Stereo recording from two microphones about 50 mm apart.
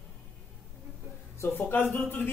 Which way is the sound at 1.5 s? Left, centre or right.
Left.